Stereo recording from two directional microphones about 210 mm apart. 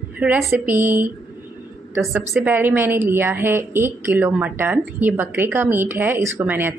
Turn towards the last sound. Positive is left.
turn(degrees=-10)  # may be behind; listen again after turning